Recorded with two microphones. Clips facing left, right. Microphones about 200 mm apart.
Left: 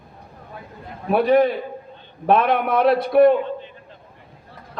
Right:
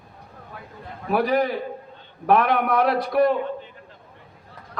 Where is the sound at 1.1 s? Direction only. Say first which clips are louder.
Left 5 dB; 25° left (ahead or behind).